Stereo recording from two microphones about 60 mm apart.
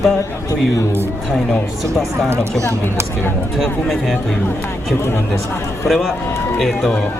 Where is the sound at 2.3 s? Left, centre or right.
Right.